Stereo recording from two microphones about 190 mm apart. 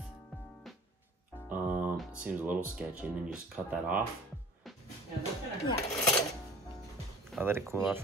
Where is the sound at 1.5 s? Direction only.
10° right (ahead or behind).